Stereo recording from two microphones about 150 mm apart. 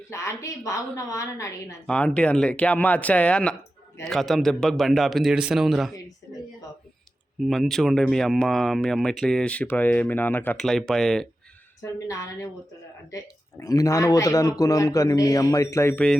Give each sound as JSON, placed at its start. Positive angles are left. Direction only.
{"t": 0.1, "sound": "speech", "side_deg": 20}
{"t": 1.9, "sound": "speech", "side_deg": 5}
{"t": 7.4, "sound": "speech", "side_deg": 0}
{"t": 11.8, "sound": "speech", "side_deg": 20}